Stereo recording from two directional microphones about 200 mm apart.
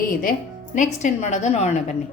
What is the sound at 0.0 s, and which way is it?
A woman's voice, 45° left (ahead or behind).